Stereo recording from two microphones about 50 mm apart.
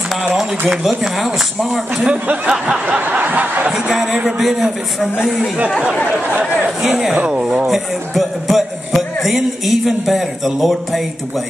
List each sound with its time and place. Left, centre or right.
0.2 s a man's voice: centre
0.8 s speech: centre
2.2 s speech: right
3.0 s a sound: right
3.7 s a man's voice: centre
7.6 s speech: centre